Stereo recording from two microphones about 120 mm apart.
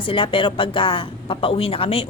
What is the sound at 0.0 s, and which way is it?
Speech, 45° left (ahead or behind).